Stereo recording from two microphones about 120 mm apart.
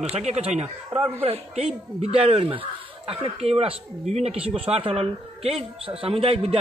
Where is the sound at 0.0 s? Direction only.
65° right (ahead or behind).